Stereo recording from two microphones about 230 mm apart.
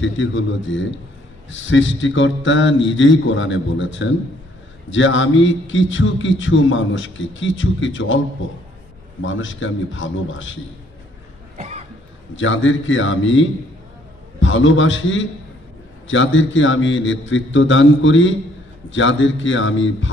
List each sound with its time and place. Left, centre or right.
0.0 s a man's voice: left
11.5 s cough: right
12.4 s a man's voice: left